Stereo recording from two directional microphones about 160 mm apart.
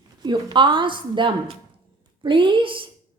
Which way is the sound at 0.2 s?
30° right (ahead or behind).